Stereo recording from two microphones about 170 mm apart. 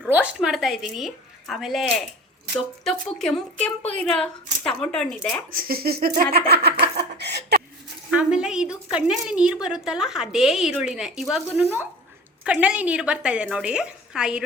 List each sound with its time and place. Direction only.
0.1 s a woman's voice: 5° right (ahead or behind)
5.5 s speech: 60° right (ahead or behind)
7.2 s a sound: 80° right
8.1 s a woman's voice: 5° right (ahead or behind)